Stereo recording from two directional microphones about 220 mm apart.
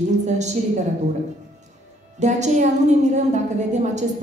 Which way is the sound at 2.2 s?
30° right (ahead or behind).